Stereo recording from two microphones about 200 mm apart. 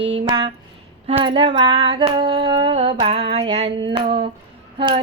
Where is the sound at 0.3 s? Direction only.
25° right (ahead or behind).